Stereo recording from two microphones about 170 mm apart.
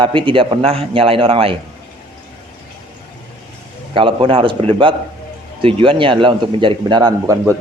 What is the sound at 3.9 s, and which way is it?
A man's voice, 30° right (ahead or behind).